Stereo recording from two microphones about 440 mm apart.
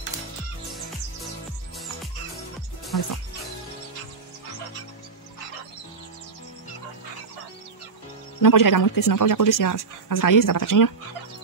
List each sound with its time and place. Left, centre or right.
2.9 s speech: left
8.4 s speech: left